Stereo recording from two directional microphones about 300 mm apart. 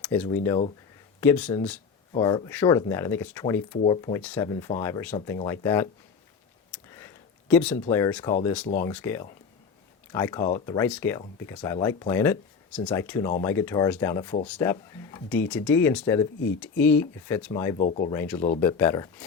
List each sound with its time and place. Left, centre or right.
0.0 s speech: centre
6.7 s a sound: centre
7.8 s speech: centre
17.7 s speech: left
18.1 s speech: centre